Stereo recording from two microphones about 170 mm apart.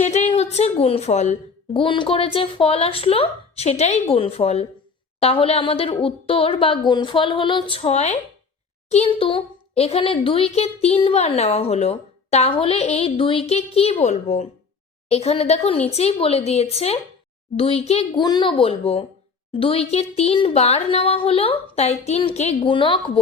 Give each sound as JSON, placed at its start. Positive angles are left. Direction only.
{"t": 0.0, "sound": "speech", "side_deg": 40}
{"t": 18.2, "sound": "speech", "side_deg": 25}